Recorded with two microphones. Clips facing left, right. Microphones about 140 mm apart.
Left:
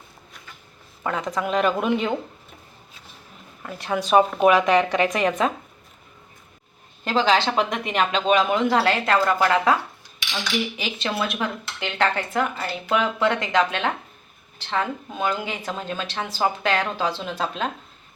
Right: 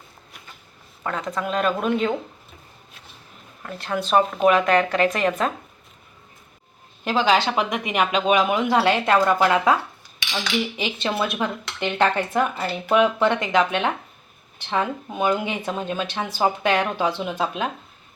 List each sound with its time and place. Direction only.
1.0 s speech: 10° left (ahead or behind)
3.6 s speech: 5° left (ahead or behind)
7.0 s a woman's voice: 10° right (ahead or behind)
10.8 s a woman's voice: 20° right (ahead or behind)